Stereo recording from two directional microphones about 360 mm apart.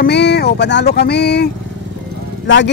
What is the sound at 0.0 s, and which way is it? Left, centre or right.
Speech, left.